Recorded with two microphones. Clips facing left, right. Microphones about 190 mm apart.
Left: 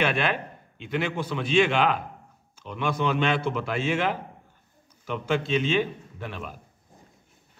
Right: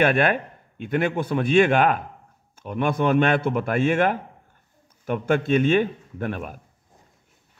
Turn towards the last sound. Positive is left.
turn(degrees=-50)  # may be behind; listen again after turning